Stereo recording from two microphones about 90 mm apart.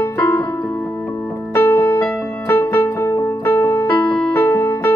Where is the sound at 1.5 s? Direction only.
30° left (ahead or behind).